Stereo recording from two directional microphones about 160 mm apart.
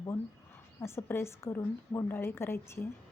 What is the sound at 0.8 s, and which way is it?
A woman's voice, 15° left (ahead or behind).